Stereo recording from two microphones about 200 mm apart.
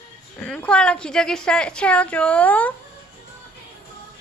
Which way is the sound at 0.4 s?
5° left (ahead or behind).